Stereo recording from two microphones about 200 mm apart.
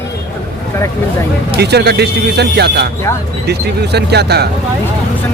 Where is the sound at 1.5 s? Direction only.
55° right (ahead or behind).